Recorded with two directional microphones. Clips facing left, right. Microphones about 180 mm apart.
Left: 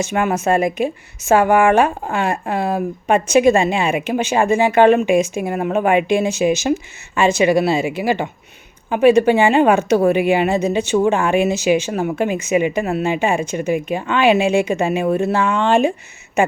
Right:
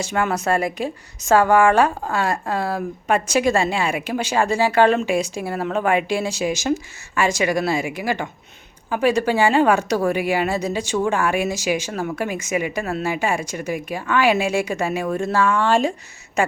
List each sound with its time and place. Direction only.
0.0 s speech: 20° left (ahead or behind)